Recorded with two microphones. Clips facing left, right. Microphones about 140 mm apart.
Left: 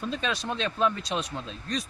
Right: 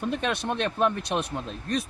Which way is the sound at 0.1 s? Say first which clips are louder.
Right 3 dB; 60° right (ahead or behind).